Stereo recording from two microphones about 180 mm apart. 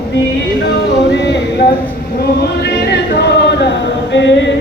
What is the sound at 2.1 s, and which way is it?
Choir, 60° left (ahead or behind).